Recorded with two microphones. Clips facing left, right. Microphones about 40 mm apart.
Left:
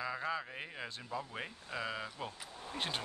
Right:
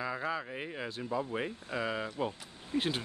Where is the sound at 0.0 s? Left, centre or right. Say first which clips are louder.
Right 3 dB; centre.